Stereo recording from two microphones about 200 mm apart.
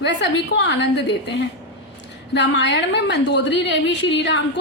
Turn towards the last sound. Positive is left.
turn(degrees=60)  # may be behind; listen again after turning